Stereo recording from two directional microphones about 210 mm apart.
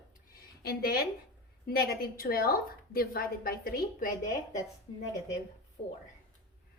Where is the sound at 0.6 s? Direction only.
45° left (ahead or behind).